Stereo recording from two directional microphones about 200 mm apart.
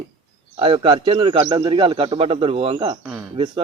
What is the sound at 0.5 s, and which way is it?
Speech, 25° right (ahead or behind).